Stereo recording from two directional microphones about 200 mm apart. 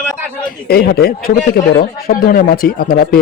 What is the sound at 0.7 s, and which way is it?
Speech, 50° left (ahead or behind).